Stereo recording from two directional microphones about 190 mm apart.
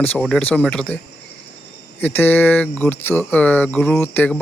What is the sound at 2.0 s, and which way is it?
Speech, 10° left (ahead or behind).